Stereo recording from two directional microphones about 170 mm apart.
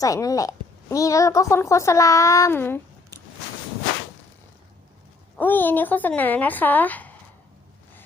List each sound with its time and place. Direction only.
0.0 s a woman's voice: 20° left (ahead or behind)
5.4 s speech: 10° left (ahead or behind)